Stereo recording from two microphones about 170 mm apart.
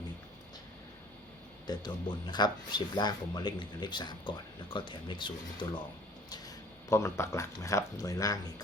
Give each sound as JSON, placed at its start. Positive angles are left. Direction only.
{"t": 1.6, "sound": "speech", "side_deg": 25}
{"t": 6.9, "sound": "speech", "side_deg": 15}